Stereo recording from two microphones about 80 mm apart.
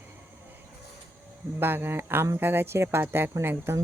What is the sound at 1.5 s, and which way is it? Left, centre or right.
A woman's voice, right.